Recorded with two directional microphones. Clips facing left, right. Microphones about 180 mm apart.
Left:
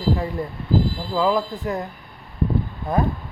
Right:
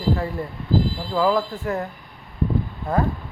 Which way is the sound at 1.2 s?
20° left (ahead or behind).